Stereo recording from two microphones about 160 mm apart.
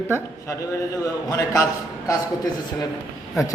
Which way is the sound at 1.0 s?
20° left (ahead or behind).